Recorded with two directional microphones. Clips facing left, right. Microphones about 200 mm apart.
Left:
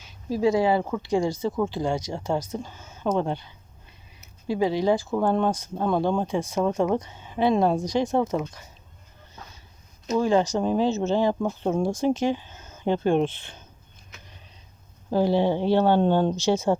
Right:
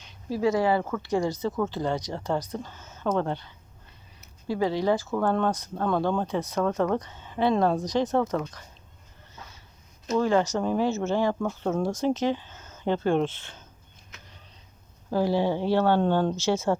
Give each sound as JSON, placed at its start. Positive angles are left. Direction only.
{"t": 0.0, "sound": "speech", "side_deg": 15}
{"t": 10.2, "sound": "speech", "side_deg": 15}
{"t": 15.1, "sound": "speech", "side_deg": 25}